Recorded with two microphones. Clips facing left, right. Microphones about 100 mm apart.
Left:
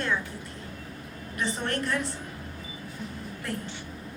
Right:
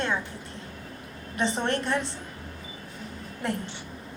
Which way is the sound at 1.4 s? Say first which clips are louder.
Right 3 dB; 20° right (ahead or behind).